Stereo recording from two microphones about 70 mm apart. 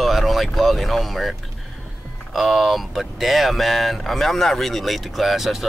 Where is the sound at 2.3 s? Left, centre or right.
Centre.